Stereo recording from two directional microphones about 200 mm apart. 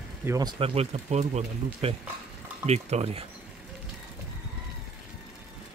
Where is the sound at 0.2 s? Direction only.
15° right (ahead or behind).